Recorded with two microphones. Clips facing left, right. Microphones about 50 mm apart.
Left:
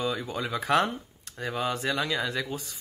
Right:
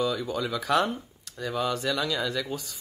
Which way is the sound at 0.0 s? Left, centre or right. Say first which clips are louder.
Right 2 dB; left.